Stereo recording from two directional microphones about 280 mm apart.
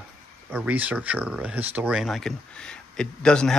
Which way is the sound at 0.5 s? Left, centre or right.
Centre.